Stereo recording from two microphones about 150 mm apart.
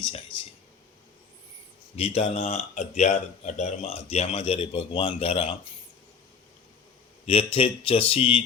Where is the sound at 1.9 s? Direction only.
40° left (ahead or behind).